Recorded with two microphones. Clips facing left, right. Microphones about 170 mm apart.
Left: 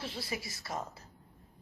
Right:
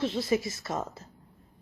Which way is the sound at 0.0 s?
20° right (ahead or behind).